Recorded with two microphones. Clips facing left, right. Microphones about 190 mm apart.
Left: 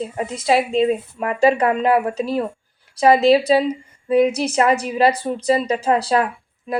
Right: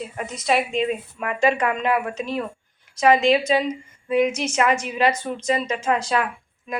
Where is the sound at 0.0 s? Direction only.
25° left (ahead or behind).